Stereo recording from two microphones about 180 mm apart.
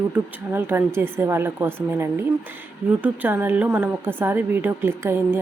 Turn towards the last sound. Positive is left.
turn(degrees=-15)  # may be behind; listen again after turning